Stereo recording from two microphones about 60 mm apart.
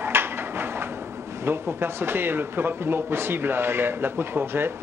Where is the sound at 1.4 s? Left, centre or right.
Right.